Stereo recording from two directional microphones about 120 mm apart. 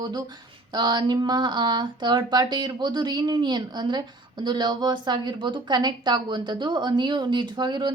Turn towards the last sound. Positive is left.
turn(degrees=-35)  # may be behind; listen again after turning